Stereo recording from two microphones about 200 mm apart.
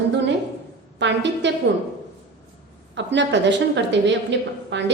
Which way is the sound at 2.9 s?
65° right (ahead or behind).